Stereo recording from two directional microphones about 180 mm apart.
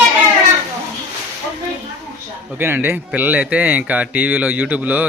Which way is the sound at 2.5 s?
10° right (ahead or behind).